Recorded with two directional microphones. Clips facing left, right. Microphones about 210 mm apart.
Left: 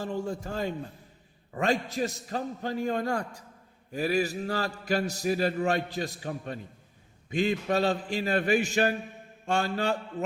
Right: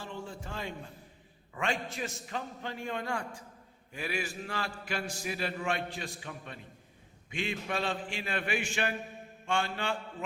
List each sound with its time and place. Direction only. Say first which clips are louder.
0.0 s a man's voice: left 9 dB; 40° left (ahead or behind)